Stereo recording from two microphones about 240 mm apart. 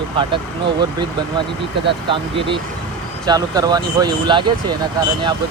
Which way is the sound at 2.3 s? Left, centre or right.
Right.